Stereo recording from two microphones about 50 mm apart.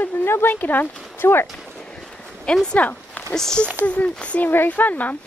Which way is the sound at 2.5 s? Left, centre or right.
Centre.